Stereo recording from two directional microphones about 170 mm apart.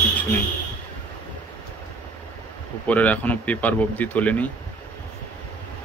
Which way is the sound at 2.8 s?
10° left (ahead or behind).